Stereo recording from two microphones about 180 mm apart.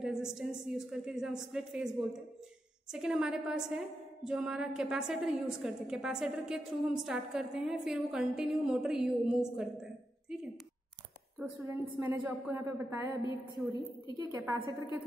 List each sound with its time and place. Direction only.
0.0 s a woman's voice: 5° right (ahead or behind)
14.1 s a woman's voice: 20° right (ahead or behind)